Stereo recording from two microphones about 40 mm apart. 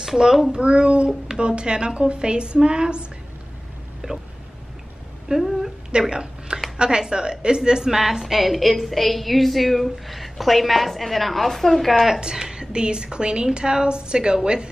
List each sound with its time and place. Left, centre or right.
0.0 s a child's voice: centre
0.5 s a woman's voice: right
4.0 s a sound: right
5.3 s speech: centre
5.9 s a sound: right
6.8 s a woman's voice: right; by 12.2 s centre
12.2 s a woman's voice: centre